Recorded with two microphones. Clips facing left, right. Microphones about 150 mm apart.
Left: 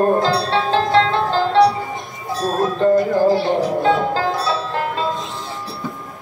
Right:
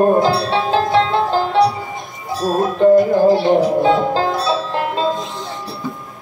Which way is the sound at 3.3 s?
20° right (ahead or behind).